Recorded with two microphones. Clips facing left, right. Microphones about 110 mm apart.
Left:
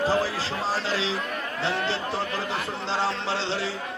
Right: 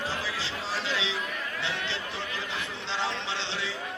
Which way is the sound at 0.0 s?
40° left (ahead or behind).